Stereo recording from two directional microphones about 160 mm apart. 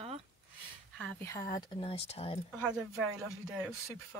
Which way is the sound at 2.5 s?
5° right (ahead or behind).